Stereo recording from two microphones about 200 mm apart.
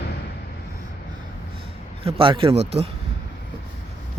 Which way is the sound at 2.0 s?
25° right (ahead or behind).